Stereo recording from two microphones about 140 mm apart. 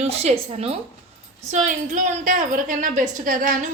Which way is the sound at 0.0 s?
50° right (ahead or behind).